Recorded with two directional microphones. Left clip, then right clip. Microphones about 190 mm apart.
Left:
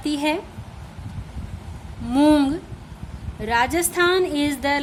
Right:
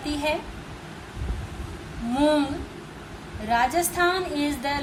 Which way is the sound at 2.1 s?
55° left (ahead or behind).